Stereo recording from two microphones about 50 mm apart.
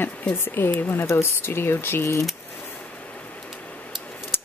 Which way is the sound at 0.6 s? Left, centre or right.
Left.